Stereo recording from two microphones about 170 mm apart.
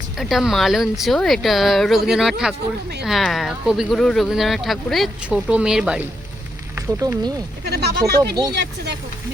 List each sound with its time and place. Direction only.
0.2 s speech: centre (ahead or behind)
6.7 s speech: 20° right (ahead or behind)
7.7 s speech: 75° right (ahead or behind)
7.9 s speech: 20° right (ahead or behind)
8.5 s speech: 90° right